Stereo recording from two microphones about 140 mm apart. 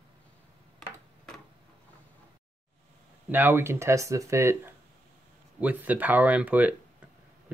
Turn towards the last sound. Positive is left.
turn(degrees=-10)  # may be behind; listen again after turning